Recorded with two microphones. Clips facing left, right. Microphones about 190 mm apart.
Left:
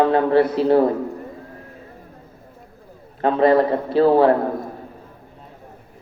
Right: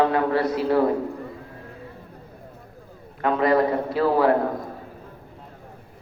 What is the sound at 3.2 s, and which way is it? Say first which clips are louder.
A man's voice: left 4 dB; 30° left (ahead or behind).